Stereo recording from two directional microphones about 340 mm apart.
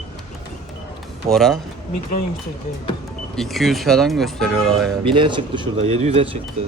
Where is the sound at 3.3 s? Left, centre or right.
Centre.